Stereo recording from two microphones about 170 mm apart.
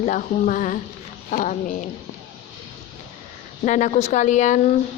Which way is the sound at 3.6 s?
45° left (ahead or behind).